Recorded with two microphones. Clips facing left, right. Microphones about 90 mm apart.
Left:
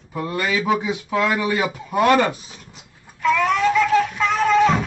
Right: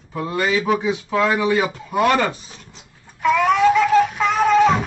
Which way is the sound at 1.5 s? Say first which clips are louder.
Right 2 dB; 5° left (ahead or behind).